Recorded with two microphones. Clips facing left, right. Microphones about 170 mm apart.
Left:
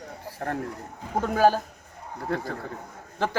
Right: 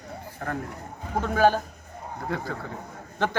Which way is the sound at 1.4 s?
40° left (ahead or behind).